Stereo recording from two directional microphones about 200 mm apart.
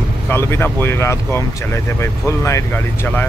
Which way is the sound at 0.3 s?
10° left (ahead or behind).